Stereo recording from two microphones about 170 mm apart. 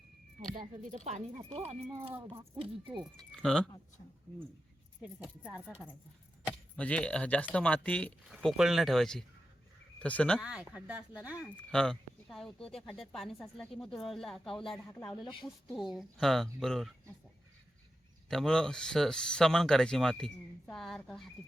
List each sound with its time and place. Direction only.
0.5 s speech: 30° right (ahead or behind)
0.8 s speech: 45° right (ahead or behind)
3.3 s speech: 5° left (ahead or behind)
5.0 s speech: 5° right (ahead or behind)
6.5 s speech: 5° left (ahead or behind)
10.4 s speech: 5° right (ahead or behind)
11.4 s speech: 5° left (ahead or behind)
18.3 s speech: 5° left (ahead or behind)